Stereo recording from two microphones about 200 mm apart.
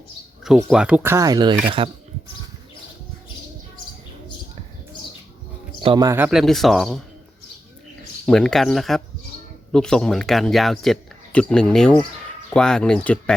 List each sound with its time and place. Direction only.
0.4 s speech: centre (ahead or behind); by 1.9 s 25° right (ahead or behind)
5.8 s speech: 25° right (ahead or behind)
6.1 s speech: 5° right (ahead or behind)
8.3 s speech: centre (ahead or behind)